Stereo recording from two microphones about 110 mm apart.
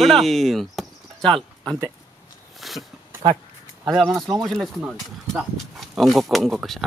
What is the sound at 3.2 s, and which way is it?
Speech, 60° right (ahead or behind).